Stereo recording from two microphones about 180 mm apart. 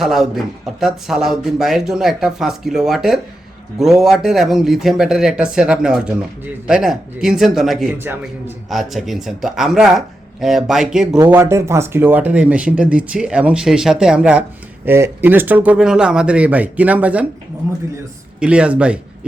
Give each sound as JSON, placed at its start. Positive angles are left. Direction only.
{"t": 0.0, "sound": "speech", "side_deg": 0}
{"t": 7.9, "sound": "speech", "side_deg": -10}
{"t": 8.7, "sound": "speech", "side_deg": 0}